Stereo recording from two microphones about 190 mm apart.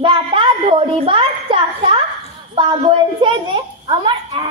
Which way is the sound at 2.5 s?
25° right (ahead or behind).